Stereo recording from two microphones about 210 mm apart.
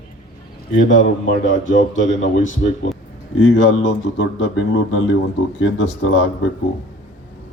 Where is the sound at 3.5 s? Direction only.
60° left (ahead or behind).